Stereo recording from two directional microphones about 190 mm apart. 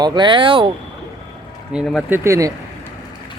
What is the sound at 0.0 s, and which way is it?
Speech, 25° right (ahead or behind).